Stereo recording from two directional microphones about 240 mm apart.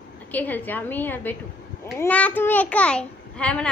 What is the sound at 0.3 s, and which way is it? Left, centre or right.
A child's voice, centre.